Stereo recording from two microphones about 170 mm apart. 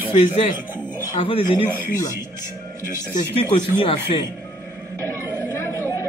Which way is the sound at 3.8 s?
30° left (ahead or behind).